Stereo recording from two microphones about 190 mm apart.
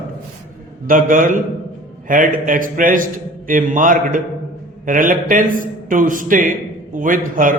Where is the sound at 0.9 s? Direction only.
45° right (ahead or behind).